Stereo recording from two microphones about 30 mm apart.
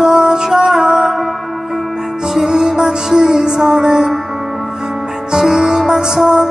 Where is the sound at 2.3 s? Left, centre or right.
Centre.